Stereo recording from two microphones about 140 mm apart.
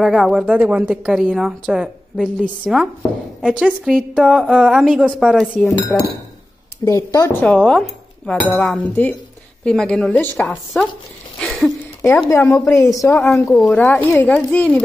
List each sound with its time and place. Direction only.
0.0 s speech: centre (ahead or behind)
6.8 s a woman's voice: 25° left (ahead or behind)
7.3 s a woman's voice: 10° left (ahead or behind)
13.3 s speech: centre (ahead or behind)